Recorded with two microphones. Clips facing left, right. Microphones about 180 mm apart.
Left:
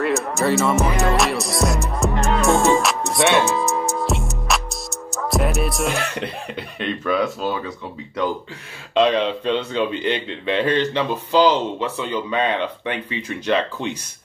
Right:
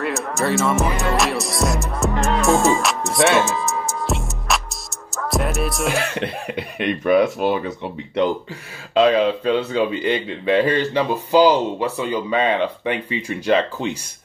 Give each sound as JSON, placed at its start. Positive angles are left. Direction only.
{"t": 0.0, "sound": "music", "side_deg": 0}
{"t": 6.4, "sound": "speech", "side_deg": -10}
{"t": 7.1, "sound": "speech", "side_deg": -60}
{"t": 8.9, "sound": "speech", "side_deg": -5}